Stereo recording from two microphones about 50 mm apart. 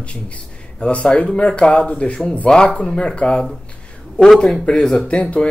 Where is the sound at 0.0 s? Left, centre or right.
Left.